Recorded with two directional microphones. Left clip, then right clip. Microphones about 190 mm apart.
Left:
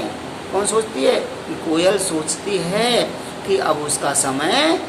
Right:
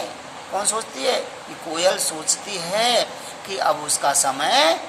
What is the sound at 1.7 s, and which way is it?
A woman's voice, 40° right (ahead or behind).